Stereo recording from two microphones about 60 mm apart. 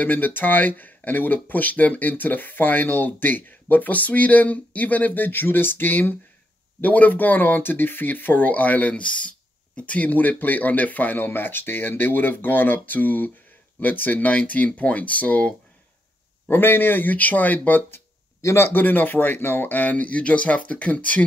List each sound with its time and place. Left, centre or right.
0.0 s speech: left
16.4 s speech: left
18.4 s speech: left